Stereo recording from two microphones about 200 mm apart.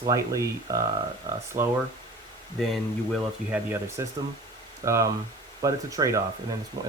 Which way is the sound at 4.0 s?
15° right (ahead or behind).